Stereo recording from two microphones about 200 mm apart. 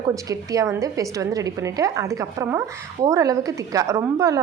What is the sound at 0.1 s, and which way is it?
A woman's voice, 15° right (ahead or behind).